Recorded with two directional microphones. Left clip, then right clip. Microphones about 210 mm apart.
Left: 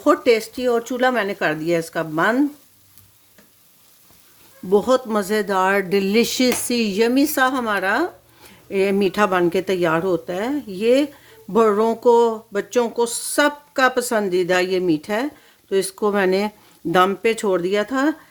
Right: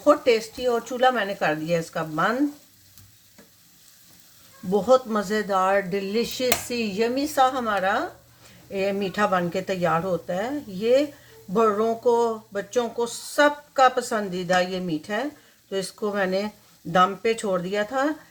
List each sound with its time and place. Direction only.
0.0 s speech: 55° left (ahead or behind)
4.7 s speech: 60° left (ahead or behind)